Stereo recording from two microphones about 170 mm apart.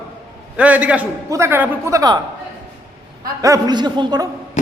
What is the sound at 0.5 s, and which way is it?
A man's voice, 10° right (ahead or behind).